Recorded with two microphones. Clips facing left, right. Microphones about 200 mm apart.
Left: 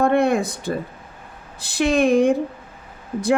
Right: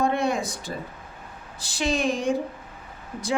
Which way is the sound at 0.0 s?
55° left (ahead or behind).